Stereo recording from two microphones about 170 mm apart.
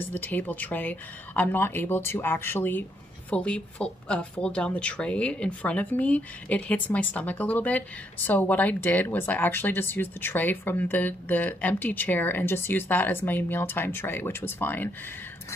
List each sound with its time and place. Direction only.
0.1 s a woman's voice: 10° left (ahead or behind)